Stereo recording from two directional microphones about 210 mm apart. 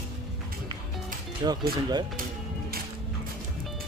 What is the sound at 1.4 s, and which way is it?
Speech, 20° right (ahead or behind).